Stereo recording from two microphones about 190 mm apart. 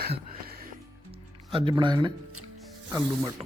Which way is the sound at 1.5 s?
25° right (ahead or behind).